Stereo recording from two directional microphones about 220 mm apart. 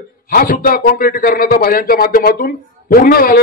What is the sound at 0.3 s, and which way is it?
Speech, 40° left (ahead or behind).